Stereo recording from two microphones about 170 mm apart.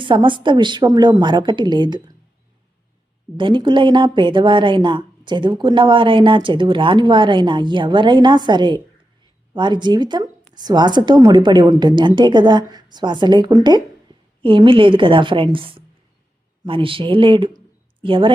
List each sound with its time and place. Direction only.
0.0 s a woman's voice: 30° right (ahead or behind)
3.3 s a woman's voice: 30° right (ahead or behind)